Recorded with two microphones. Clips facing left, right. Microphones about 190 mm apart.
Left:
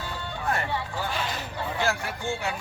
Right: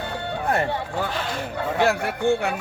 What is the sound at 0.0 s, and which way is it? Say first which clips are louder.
Music: right 5 dB; 60° right (ahead or behind).